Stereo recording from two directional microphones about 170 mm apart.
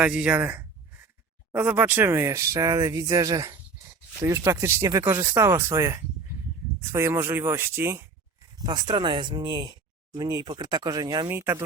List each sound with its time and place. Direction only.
0.0 s speech: 5° right (ahead or behind)
8.5 s speech: 25° right (ahead or behind)